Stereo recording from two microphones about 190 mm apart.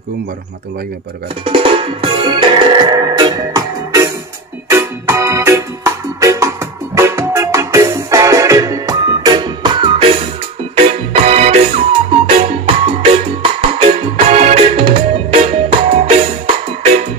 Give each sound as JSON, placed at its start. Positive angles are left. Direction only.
{"t": 1.4, "sound": "music", "side_deg": -30}